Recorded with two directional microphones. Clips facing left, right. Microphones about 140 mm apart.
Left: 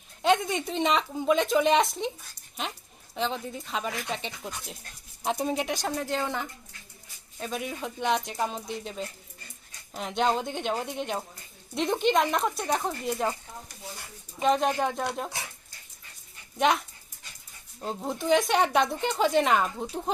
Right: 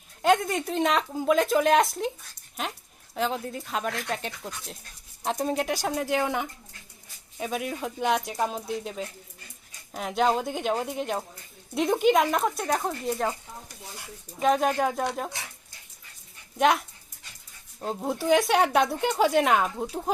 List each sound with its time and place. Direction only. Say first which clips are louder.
0.2 s speech: right 2 dB; centre (ahead or behind)
3.2 s speech: right 2 dB; 5° right (ahead or behind)
6.1 s speech: right 4 dB; 15° right (ahead or behind)
7.3 s speech: right 3 dB; 5° right (ahead or behind)
14.4 s speech: right 1 dB; centre (ahead or behind)
16.6 s speech: right 2 dB; centre (ahead or behind)